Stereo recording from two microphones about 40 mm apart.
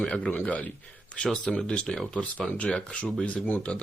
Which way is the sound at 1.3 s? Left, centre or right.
Centre.